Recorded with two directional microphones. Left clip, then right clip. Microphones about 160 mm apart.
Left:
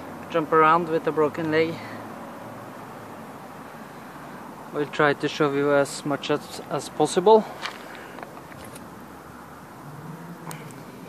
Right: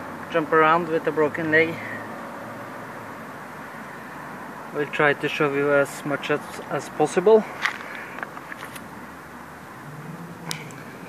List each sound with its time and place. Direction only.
0.3 s speech: 15° left (ahead or behind)
4.7 s speech: 20° left (ahead or behind)